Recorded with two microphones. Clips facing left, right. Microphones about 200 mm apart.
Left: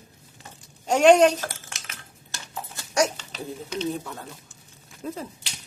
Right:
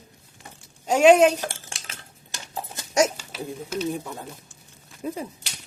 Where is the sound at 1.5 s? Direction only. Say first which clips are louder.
Right 1 dB; 30° right (ahead or behind).